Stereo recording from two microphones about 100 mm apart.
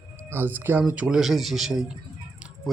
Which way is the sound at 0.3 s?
20° right (ahead or behind).